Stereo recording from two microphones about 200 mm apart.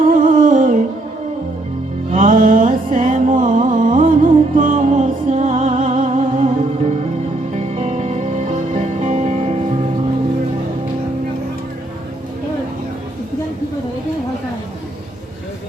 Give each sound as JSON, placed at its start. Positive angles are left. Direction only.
{"t": 0.1, "sound": "music", "side_deg": -40}
{"t": 2.1, "sound": "music", "side_deg": -40}
{"t": 7.5, "sound": "music", "side_deg": -30}